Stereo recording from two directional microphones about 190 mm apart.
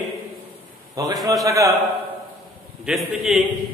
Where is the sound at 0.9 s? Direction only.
20° right (ahead or behind).